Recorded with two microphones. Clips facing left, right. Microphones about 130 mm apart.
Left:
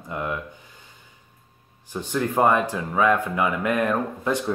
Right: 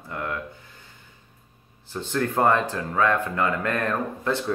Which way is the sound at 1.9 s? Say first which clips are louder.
Left 1 dB; 15° left (ahead or behind).